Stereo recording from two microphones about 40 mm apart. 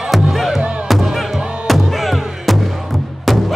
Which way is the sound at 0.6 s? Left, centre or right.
Right.